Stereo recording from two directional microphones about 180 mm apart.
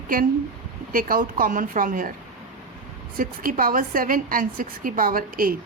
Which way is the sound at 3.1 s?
50° right (ahead or behind).